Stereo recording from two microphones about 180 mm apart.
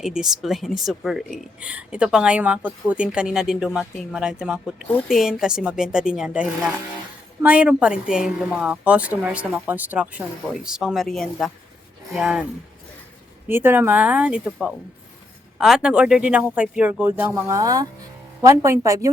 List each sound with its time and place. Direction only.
0.0 s speech: 5° right (ahead or behind)
13.5 s speech: 10° right (ahead or behind)